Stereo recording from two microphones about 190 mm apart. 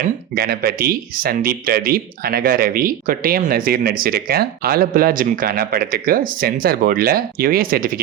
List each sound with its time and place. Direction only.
0.3 s speech: 55° right (ahead or behind)